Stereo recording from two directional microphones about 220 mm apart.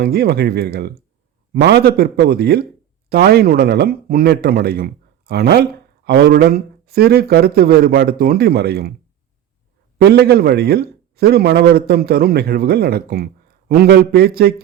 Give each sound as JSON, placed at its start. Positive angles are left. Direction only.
{"t": 0.0, "sound": "a man's voice", "side_deg": -45}
{"t": 10.0, "sound": "a man's voice", "side_deg": -45}